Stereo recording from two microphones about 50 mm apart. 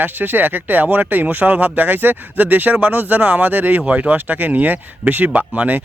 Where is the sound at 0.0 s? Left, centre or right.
Right.